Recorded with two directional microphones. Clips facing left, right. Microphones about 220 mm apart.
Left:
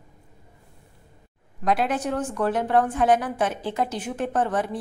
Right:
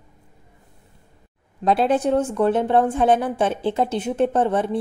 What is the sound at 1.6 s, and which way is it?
A woman's voice, 30° right (ahead or behind).